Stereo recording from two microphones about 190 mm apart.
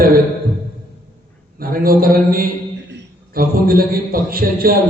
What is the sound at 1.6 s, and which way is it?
A man's voice, 50° right (ahead or behind).